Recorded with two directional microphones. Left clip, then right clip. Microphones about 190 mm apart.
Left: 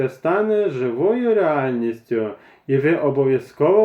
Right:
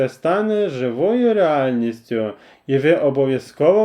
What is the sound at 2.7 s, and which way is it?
Speech, 50° right (ahead or behind).